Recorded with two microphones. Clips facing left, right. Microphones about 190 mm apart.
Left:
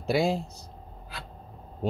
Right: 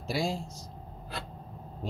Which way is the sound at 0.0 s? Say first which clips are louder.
Left 6 dB; 60° left (ahead or behind).